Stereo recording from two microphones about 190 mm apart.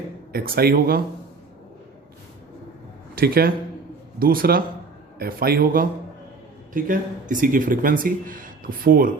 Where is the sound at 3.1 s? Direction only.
50° right (ahead or behind).